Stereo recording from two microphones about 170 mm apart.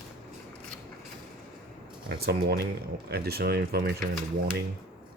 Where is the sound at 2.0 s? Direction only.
70° right (ahead or behind).